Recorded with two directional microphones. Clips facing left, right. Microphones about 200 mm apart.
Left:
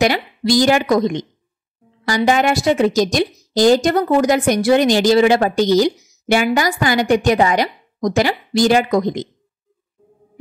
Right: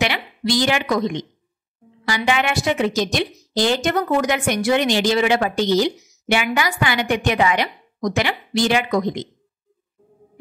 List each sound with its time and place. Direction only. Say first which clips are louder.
0.0 s a woman's voice: left 6 dB; 40° left (ahead or behind)